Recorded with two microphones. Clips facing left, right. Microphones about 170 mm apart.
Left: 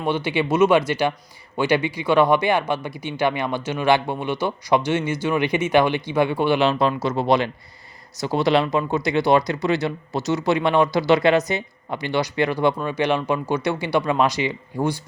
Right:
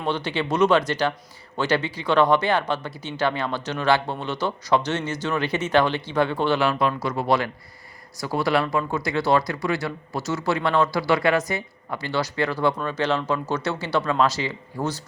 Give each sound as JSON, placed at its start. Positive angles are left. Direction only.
{"t": 0.3, "sound": "speech", "side_deg": 10}